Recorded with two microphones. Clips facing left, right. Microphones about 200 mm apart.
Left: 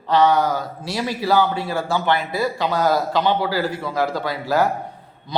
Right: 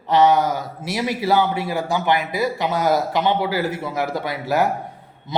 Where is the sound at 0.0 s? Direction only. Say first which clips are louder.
Right 1 dB; 20° right (ahead or behind).